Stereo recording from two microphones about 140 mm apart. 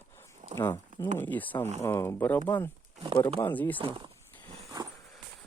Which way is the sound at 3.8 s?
35° right (ahead or behind).